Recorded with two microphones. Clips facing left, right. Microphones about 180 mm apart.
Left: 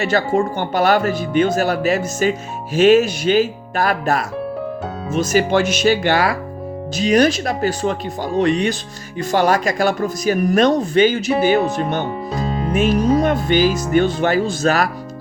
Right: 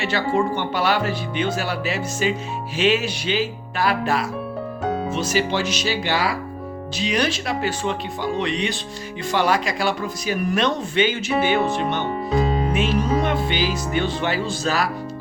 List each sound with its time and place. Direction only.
0.0 s speech: 45° left (ahead or behind)